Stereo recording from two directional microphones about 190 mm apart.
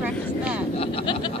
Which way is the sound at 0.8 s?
25° left (ahead or behind).